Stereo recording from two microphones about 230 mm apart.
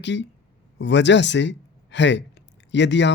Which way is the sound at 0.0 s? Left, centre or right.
Left.